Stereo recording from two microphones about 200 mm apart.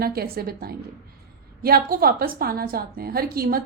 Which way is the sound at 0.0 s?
50° right (ahead or behind).